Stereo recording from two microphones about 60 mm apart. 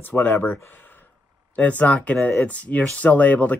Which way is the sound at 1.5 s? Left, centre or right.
Left.